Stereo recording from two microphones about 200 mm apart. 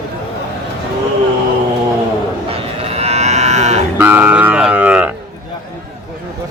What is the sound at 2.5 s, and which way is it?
Livestock, 30° right (ahead or behind).